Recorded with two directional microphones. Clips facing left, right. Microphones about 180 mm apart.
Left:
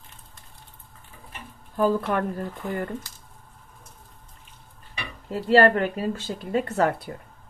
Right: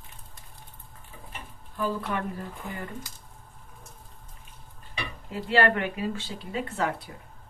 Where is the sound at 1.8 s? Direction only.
50° left (ahead or behind).